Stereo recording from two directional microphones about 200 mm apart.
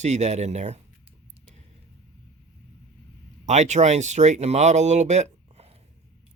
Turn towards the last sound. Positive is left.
turn(degrees=-30)  # may be behind; listen again after turning